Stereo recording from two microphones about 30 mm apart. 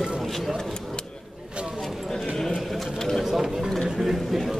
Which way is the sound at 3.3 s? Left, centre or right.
Centre.